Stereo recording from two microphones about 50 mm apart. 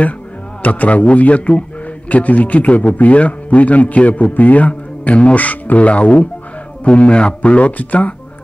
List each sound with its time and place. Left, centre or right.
0.6 s a man's voice: left